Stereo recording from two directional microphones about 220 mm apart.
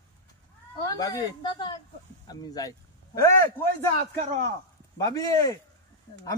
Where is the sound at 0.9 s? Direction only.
15° left (ahead or behind).